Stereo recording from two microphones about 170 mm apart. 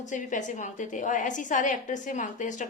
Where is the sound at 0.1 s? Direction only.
45° left (ahead or behind).